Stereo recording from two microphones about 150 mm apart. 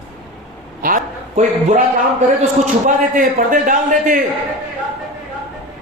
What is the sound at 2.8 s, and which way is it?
A man's voice, 60° right (ahead or behind).